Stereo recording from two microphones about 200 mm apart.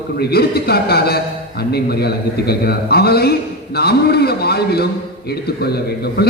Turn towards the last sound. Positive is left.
turn(degrees=55)  # may be behind; listen again after turning